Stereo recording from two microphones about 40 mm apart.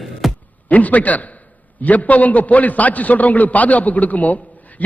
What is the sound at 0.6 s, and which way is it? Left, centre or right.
A man's voice, left.